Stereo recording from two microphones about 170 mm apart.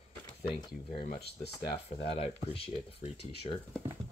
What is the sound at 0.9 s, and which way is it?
Speech, 35° left (ahead or behind).